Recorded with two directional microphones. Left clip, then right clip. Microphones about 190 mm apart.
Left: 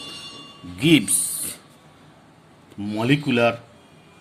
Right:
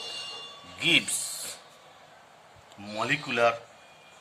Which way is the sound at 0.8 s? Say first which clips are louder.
Left 5 dB; 30° left (ahead or behind).